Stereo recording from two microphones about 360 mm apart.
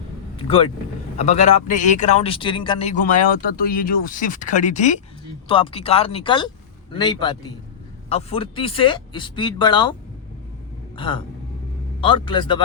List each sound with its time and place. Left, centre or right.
0.3 s speech: centre
10.9 s speech: centre